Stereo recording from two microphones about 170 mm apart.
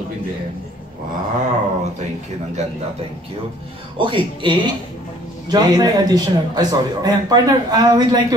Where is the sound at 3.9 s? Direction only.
30° right (ahead or behind).